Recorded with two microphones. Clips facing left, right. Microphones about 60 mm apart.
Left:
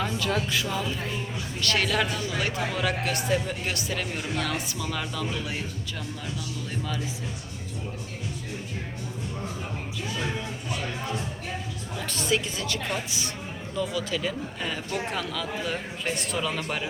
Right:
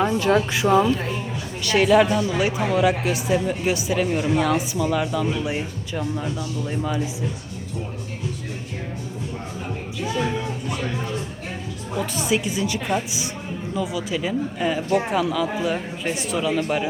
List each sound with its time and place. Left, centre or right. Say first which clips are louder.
0.0 s speech: right 8 dB; right
1.6 s speech: right 9 dB; centre
11.9 s speech: right 5 dB; centre